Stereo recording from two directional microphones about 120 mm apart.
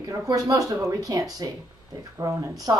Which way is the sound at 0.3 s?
30° right (ahead or behind).